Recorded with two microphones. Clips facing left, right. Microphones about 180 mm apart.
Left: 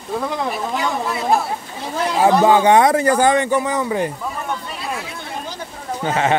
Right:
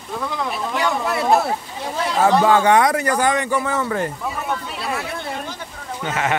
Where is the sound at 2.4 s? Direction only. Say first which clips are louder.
Left 4 dB; 20° left (ahead or behind).